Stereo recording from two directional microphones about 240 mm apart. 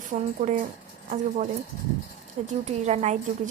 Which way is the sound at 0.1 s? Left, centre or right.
Right.